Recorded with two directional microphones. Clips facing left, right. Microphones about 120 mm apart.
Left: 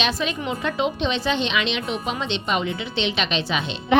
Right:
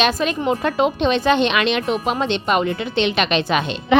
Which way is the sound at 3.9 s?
90° right.